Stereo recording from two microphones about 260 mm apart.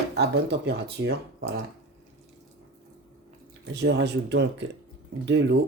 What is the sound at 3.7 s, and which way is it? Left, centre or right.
Speech, right.